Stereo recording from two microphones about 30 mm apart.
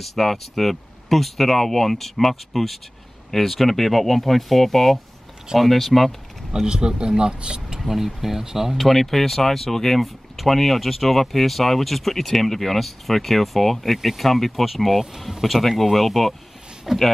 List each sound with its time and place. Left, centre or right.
0.0 s speech: centre
6.6 s speech: right
7.9 s speech: centre
8.7 s speech: centre